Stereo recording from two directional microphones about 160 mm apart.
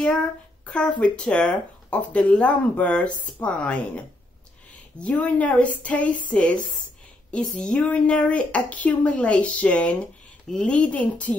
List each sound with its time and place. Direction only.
0.7 s speech: 5° left (ahead or behind)